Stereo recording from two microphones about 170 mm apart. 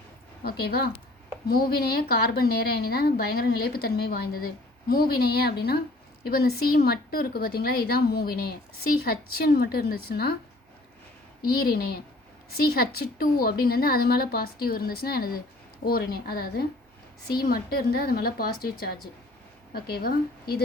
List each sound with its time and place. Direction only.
0.4 s a woman's voice: 65° left (ahead or behind)
11.4 s speech: 65° left (ahead or behind)